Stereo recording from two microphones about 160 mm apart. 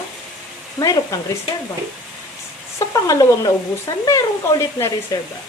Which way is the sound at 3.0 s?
20° left (ahead or behind).